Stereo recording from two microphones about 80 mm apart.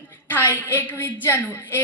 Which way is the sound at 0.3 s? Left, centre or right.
Left.